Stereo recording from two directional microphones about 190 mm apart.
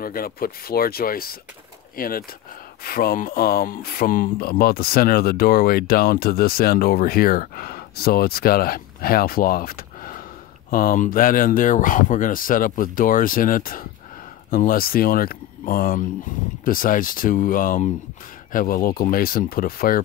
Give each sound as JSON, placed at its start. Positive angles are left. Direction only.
{"t": 0.0, "sound": "speech", "side_deg": 50}